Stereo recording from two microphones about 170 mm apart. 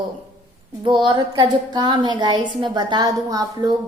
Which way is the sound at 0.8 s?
25° right (ahead or behind).